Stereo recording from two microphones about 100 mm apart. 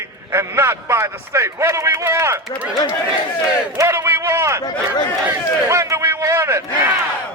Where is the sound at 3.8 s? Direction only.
25° right (ahead or behind).